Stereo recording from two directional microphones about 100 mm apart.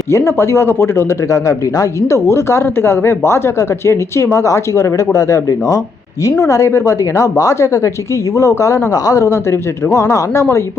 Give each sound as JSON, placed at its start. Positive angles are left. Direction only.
{"t": 0.1, "sound": "a woman's voice", "side_deg": 25}